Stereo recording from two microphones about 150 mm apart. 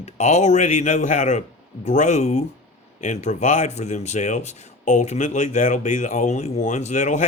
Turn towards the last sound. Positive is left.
turn(degrees=55)  # may be behind; listen again after turning